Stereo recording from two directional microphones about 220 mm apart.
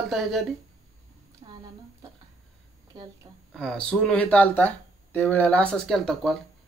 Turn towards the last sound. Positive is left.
turn(degrees=0)  # may be behind; listen again after turning